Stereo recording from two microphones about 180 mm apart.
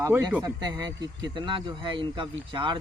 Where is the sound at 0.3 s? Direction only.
20° right (ahead or behind).